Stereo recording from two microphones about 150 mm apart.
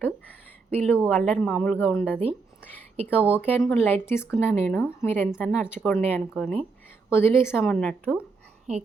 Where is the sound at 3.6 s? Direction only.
Centre (ahead or behind).